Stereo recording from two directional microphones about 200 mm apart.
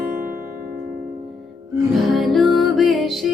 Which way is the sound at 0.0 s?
10° right (ahead or behind).